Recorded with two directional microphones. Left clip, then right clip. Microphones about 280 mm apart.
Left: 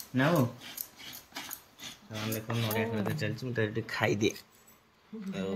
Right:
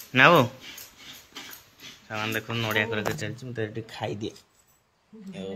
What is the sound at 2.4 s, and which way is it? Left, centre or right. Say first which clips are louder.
Speech: right 6 dB; centre.